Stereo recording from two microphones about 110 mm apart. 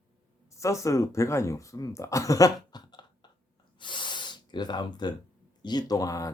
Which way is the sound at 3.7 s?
45° left (ahead or behind).